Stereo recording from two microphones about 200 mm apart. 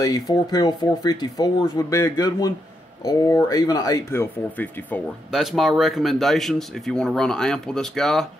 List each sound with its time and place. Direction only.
0.0 s speech: 20° left (ahead or behind)
5.3 s speech: centre (ahead or behind)